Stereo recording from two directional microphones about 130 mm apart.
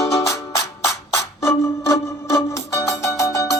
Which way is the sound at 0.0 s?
25° left (ahead or behind).